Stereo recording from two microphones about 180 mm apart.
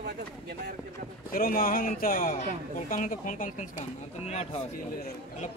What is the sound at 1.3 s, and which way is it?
Speech, 55° left (ahead or behind).